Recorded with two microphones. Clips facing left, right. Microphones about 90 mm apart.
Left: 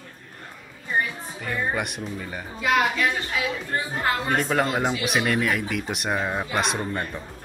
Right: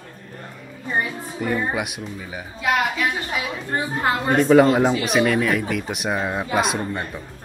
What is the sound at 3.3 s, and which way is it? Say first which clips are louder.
Speech: right 1 dB; 20° right (ahead or behind).